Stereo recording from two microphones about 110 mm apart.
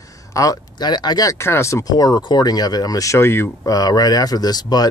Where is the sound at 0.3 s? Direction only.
30° left (ahead or behind).